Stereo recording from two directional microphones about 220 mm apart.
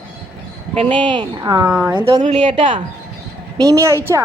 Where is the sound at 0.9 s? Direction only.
20° right (ahead or behind).